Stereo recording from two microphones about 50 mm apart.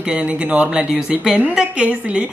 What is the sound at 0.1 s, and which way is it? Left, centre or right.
Speech, right.